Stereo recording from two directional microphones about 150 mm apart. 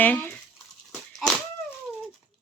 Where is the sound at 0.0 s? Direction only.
10° left (ahead or behind).